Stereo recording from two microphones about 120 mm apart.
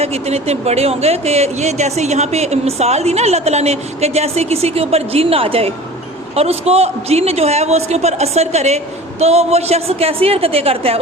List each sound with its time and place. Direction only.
0.0 s speech: 60° right (ahead or behind)